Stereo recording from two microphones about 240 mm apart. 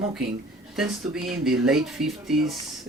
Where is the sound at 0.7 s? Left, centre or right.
Centre.